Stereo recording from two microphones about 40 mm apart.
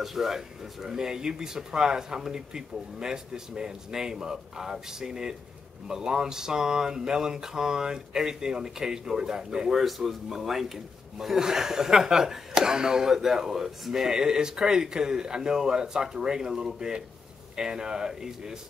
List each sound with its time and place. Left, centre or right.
0.0 s speech: centre
9.8 s speech: centre